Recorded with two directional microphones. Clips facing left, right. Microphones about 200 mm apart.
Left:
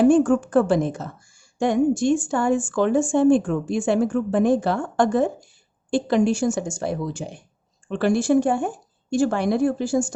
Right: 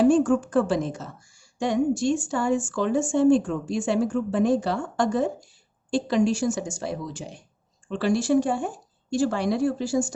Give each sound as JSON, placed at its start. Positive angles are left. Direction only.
{"t": 0.0, "sound": "a woman's voice", "side_deg": 55}